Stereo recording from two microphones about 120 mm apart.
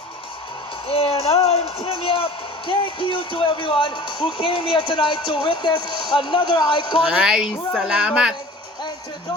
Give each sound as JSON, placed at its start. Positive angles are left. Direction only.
{"t": 0.9, "sound": "a man's voice", "side_deg": 55}
{"t": 7.1, "sound": "speech", "side_deg": -5}